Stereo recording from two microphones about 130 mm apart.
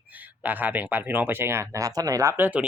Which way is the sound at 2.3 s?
15° right (ahead or behind).